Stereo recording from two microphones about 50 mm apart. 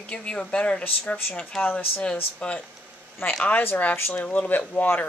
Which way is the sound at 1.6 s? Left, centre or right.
Left.